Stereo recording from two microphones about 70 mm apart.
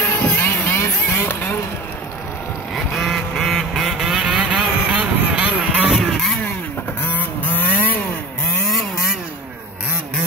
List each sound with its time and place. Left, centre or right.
0.0 s vehicle: left
2.7 s vehicle: centre
4.8 s vehicle: centre
6.1 s vehicle: centre
7.0 s vehicle: left